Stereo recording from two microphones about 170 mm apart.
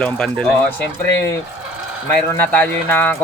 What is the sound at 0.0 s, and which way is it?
Speech, 5° left (ahead or behind).